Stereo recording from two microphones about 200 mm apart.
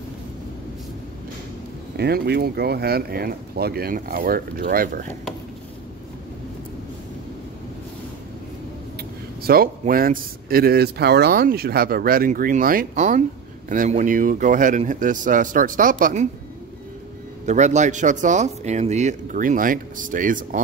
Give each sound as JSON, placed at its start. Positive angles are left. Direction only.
{"t": 2.0, "sound": "speech", "side_deg": -55}
{"t": 9.4, "sound": "speech", "side_deg": -50}
{"t": 17.5, "sound": "speech", "side_deg": -35}